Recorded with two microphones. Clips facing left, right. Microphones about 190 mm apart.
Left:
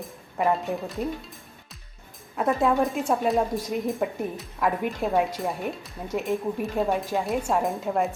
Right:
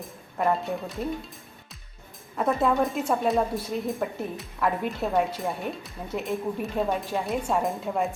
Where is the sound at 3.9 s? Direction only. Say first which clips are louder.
Left 2 dB; centre (ahead or behind).